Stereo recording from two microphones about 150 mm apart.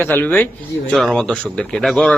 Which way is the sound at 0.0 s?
10° left (ahead or behind).